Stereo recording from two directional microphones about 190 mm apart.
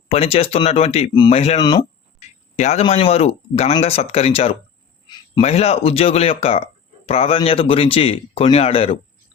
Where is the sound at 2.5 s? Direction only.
40° left (ahead or behind).